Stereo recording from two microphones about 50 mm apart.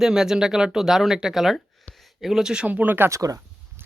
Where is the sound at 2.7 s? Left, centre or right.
Right.